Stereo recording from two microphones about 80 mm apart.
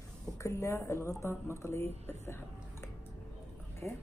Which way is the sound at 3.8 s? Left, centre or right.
Left.